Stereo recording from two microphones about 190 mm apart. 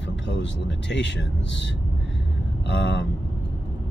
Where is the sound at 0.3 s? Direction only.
65° left (ahead or behind).